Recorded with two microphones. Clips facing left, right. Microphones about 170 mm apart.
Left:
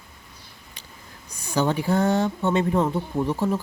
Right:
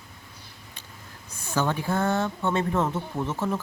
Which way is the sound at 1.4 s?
15° left (ahead or behind).